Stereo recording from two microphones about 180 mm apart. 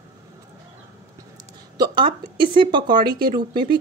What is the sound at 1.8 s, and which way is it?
Speech, 25° right (ahead or behind).